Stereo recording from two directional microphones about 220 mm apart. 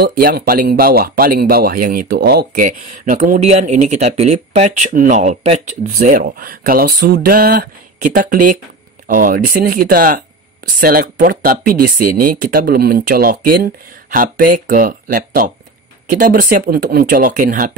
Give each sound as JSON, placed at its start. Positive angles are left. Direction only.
{"t": 0.0, "sound": "speech", "side_deg": -40}